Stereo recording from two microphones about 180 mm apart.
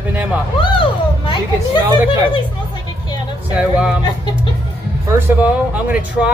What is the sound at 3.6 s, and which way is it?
Speech, 5° right (ahead or behind).